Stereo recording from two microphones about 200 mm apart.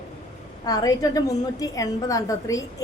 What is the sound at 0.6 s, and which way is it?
A woman's voice, 20° left (ahead or behind).